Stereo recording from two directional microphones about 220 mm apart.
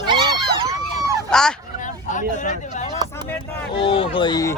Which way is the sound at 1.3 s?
Centre (ahead or behind).